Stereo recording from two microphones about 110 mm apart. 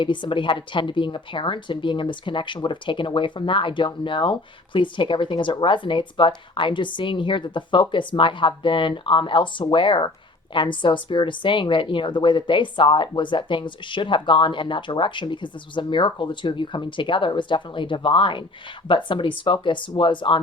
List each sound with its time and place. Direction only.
0.0 s a woman's voice: 45° left (ahead or behind)